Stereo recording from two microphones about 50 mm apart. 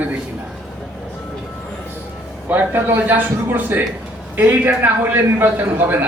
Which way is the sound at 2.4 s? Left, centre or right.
Right.